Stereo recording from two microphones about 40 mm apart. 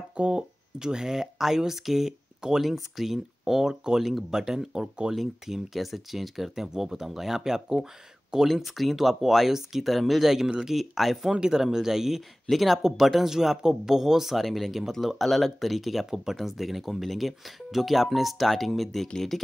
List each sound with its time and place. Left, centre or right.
0.2 s speech: centre
5.1 s speech: centre
11.3 s speech: centre